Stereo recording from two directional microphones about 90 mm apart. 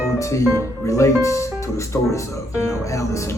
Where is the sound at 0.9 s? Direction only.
35° left (ahead or behind).